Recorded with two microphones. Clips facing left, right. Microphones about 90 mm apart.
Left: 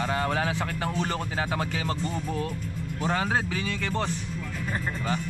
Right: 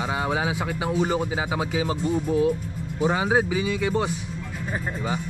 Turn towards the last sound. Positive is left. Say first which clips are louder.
# right 5 dB
turn(degrees=-10)  # may be behind; listen again after turning